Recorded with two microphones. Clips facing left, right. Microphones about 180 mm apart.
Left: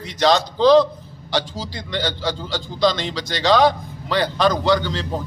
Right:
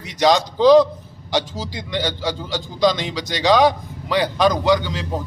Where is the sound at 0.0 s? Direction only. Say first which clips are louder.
Right 1 dB; 15° right (ahead or behind).